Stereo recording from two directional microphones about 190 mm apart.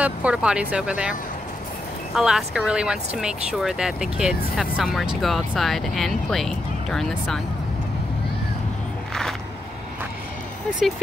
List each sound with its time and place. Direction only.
0.0 s speech: 5° right (ahead or behind)
2.1 s speech: centre (ahead or behind)